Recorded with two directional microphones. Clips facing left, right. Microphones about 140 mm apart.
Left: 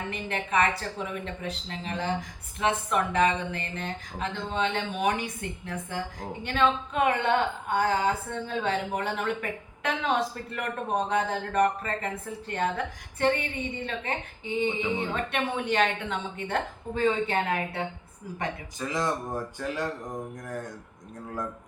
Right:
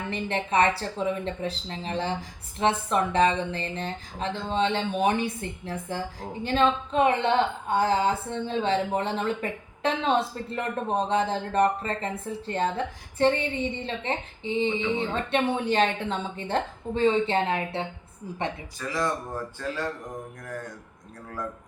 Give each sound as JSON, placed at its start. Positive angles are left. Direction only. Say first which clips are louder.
{"t": 0.1, "sound": "speech", "louder": "right 3 dB", "side_deg": -30}
{"t": 18.8, "sound": "speech", "louder": "right 1 dB", "side_deg": 20}